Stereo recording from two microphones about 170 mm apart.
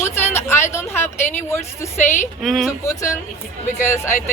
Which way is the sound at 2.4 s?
Centre (ahead or behind).